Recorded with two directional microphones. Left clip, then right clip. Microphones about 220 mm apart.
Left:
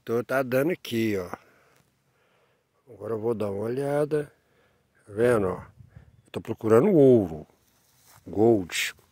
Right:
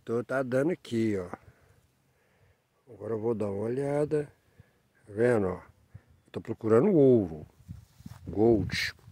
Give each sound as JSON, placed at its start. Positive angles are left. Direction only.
{"t": 0.0, "sound": "speech", "side_deg": 15}
{"t": 2.9, "sound": "speech", "side_deg": 0}
{"t": 7.7, "sound": "a sound", "side_deg": 45}
{"t": 8.4, "sound": "speech", "side_deg": 10}